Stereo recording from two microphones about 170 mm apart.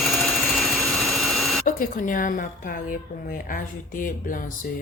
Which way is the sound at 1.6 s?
50° left (ahead or behind).